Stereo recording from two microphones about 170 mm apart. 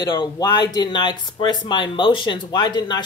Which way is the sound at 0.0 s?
25° left (ahead or behind).